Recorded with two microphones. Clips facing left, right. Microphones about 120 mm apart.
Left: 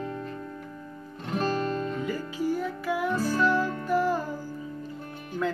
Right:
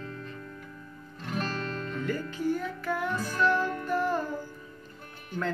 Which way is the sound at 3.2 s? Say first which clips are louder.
Left 3 dB; 35° left (ahead or behind).